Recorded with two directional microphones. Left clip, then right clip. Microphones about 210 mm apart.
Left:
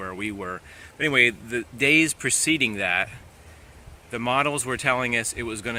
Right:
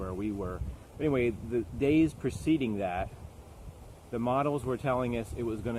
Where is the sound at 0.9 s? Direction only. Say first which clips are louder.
Left 10 dB; 10° left (ahead or behind).